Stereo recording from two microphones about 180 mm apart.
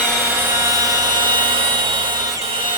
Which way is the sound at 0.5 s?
15° right (ahead or behind).